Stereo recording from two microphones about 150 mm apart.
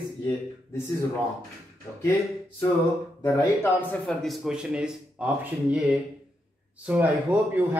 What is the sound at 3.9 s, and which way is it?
Speech, centre (ahead or behind).